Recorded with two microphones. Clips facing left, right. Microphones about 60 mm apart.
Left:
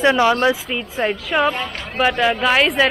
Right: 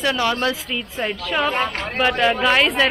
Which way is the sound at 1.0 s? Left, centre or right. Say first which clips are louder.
Left 4 dB; centre.